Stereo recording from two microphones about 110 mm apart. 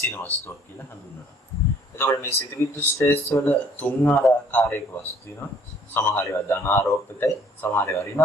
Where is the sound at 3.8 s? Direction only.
15° left (ahead or behind).